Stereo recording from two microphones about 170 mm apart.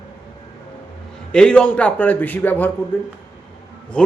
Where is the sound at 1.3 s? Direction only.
5° left (ahead or behind).